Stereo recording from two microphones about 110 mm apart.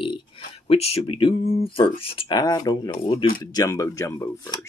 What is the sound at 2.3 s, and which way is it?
Speech, 35° left (ahead or behind).